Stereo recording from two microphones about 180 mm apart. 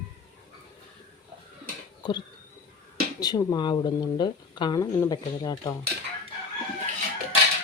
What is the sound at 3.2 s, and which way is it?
Speech, 20° left (ahead or behind).